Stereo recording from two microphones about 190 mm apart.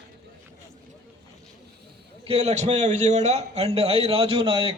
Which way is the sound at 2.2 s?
30° right (ahead or behind).